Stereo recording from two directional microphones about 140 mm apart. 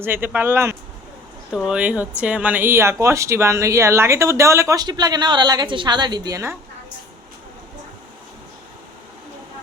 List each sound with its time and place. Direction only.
0.0 s speech: 15° right (ahead or behind)
1.5 s speech: 5° right (ahead or behind); by 6.4 s 30° right (ahead or behind)